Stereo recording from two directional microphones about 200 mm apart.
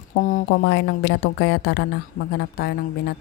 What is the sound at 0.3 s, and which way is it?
Speech, 55° left (ahead or behind).